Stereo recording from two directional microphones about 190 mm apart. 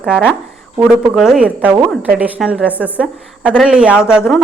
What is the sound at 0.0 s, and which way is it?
A woman's voice, 5° right (ahead or behind).